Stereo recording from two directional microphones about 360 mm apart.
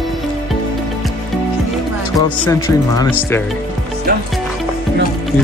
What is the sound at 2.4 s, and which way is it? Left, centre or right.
Speech, centre.